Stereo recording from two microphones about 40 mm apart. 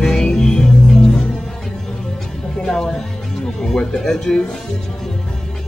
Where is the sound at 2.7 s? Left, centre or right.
Centre.